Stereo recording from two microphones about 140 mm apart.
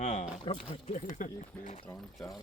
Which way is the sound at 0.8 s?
60° left (ahead or behind).